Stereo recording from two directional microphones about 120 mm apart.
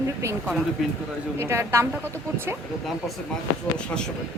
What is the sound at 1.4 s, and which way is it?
Speech, 25° right (ahead or behind).